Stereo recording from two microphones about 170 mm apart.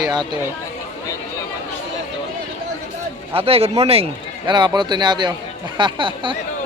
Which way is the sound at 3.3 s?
35° right (ahead or behind).